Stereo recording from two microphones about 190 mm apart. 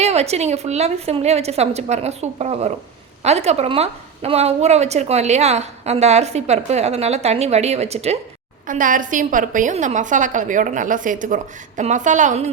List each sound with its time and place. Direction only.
0.0 s a woman's voice: 35° right (ahead or behind)
8.6 s a woman's voice: 45° right (ahead or behind)